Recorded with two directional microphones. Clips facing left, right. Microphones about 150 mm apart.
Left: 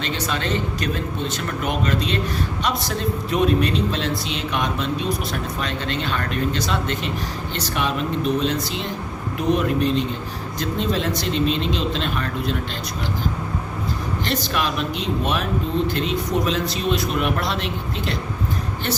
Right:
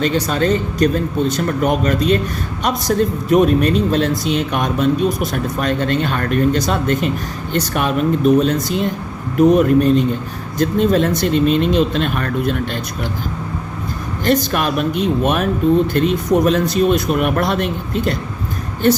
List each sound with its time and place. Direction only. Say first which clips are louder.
0.0 s a man's voice: right 9 dB; 45° right (ahead or behind)
14.3 s a man's voice: right 9 dB; 50° right (ahead or behind)